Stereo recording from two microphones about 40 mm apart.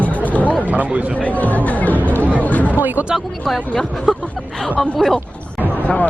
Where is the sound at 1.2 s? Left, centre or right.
Left.